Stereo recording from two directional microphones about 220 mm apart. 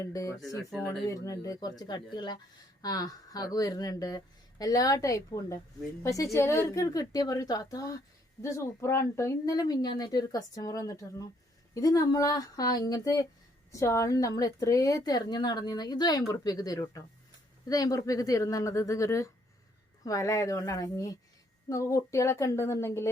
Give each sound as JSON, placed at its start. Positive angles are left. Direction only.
{"t": 0.0, "sound": "a woman's voice", "side_deg": 15}
{"t": 0.7, "sound": "speech", "side_deg": 0}
{"t": 1.0, "sound": "a woman's voice", "side_deg": 15}